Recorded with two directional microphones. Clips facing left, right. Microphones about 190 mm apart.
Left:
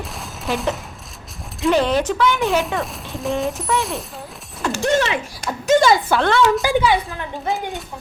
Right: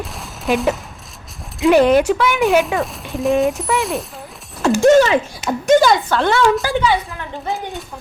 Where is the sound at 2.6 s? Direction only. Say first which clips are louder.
Right 4 dB; centre (ahead or behind).